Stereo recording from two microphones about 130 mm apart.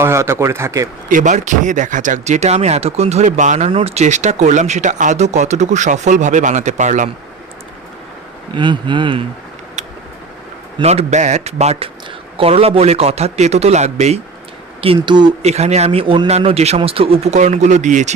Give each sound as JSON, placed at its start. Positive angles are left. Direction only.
{"t": 0.0, "sound": "a man's voice", "side_deg": -20}
{"t": 1.1, "sound": "speech", "side_deg": -75}
{"t": 3.7, "sound": "speech", "side_deg": -45}
{"t": 8.5, "sound": "speech", "side_deg": -35}
{"t": 10.8, "sound": "a man's voice", "side_deg": -60}
{"t": 14.8, "sound": "speech", "side_deg": -40}
{"t": 15.4, "sound": "a man's voice", "side_deg": -55}